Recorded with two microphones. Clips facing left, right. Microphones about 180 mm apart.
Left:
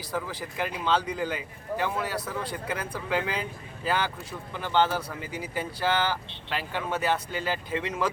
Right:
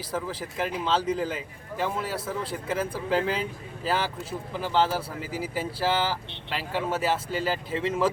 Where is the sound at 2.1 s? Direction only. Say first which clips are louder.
Right 1 dB; 25° right (ahead or behind).